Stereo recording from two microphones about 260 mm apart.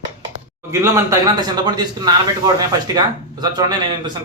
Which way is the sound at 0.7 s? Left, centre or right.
Centre.